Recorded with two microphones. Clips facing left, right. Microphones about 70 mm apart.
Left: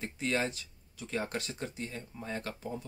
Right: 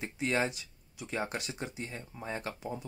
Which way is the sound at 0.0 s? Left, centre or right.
Centre.